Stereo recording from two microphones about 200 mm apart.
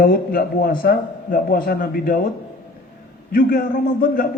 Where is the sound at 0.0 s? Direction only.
50° left (ahead or behind).